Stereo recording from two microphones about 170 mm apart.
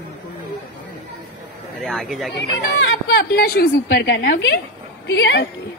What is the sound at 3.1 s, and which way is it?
A woman's voice, 65° left (ahead or behind).